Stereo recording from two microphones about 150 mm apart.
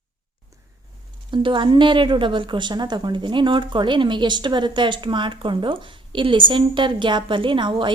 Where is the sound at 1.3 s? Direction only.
30° right (ahead or behind).